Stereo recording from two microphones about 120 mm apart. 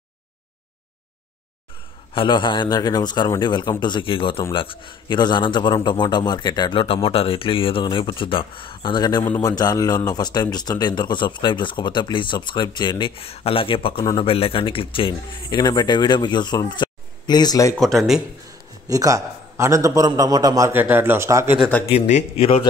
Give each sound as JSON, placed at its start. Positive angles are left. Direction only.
{"t": 2.1, "sound": "a man's voice", "side_deg": 40}
{"t": 17.7, "sound": "speech", "side_deg": 0}
{"t": 18.9, "sound": "a man's voice", "side_deg": -30}
{"t": 20.7, "sound": "a man's voice", "side_deg": -15}
{"t": 21.5, "sound": "a man's voice", "side_deg": 10}
{"t": 21.9, "sound": "a man's voice", "side_deg": 70}